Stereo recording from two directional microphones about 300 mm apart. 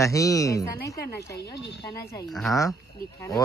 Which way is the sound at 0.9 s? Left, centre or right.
Left.